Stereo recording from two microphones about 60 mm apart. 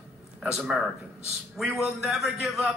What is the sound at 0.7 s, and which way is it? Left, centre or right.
Speech, centre.